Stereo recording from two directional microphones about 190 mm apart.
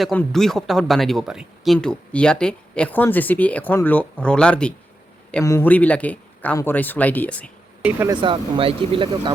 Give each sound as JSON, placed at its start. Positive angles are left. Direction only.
{"t": 0.0, "sound": "a man's voice", "side_deg": 5}
{"t": 7.9, "sound": "speech", "side_deg": -10}
{"t": 8.1, "sound": "speech", "side_deg": -25}